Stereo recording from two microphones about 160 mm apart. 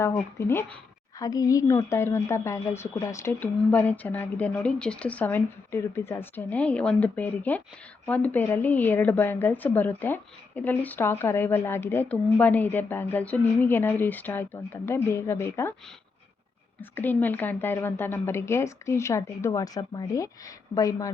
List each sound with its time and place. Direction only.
0.0 s a woman's voice: 15° left (ahead or behind)
16.9 s a woman's voice: 10° left (ahead or behind)